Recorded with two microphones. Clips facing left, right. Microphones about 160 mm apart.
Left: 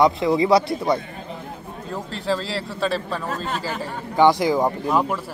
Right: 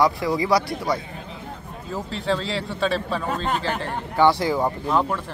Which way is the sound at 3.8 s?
15° left (ahead or behind).